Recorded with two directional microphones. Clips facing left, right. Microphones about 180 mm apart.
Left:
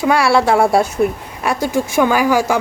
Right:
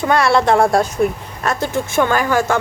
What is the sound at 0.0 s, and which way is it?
A woman's voice, 5° left (ahead or behind).